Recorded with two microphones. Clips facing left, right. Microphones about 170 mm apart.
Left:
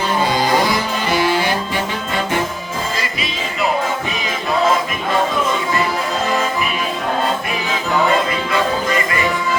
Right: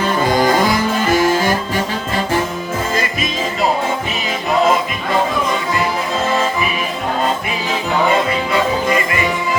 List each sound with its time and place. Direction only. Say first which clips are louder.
0.3 s music: right 4 dB; 50° right (ahead or behind)
2.9 s music: right 4 dB; 45° right (ahead or behind)